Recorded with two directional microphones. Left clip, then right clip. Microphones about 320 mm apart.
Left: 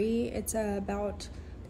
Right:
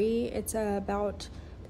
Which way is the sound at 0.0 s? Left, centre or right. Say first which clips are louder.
Right 2 dB; centre.